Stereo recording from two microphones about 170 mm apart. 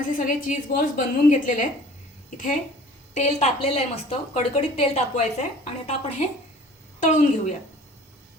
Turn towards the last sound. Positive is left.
turn(degrees=45)  # may be behind; listen again after turning